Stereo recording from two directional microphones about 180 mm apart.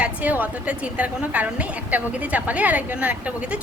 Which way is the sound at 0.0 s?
10° right (ahead or behind).